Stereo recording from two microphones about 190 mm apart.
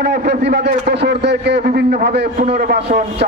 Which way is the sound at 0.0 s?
60° right (ahead or behind).